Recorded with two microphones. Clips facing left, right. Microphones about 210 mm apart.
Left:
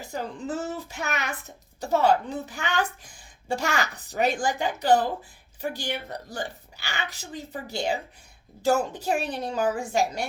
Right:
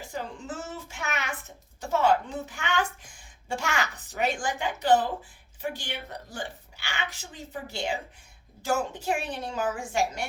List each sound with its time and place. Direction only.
0.0 s a child's voice: 40° left (ahead or behind)